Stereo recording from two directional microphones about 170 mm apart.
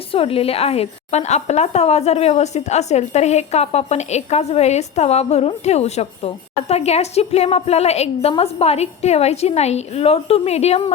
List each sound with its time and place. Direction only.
0.1 s a woman's voice: 35° left (ahead or behind)